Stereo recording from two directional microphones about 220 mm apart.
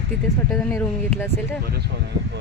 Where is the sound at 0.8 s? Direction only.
10° left (ahead or behind).